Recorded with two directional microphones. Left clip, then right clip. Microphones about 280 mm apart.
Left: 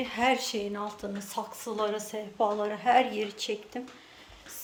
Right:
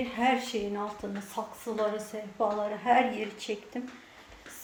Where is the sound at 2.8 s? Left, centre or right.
Left.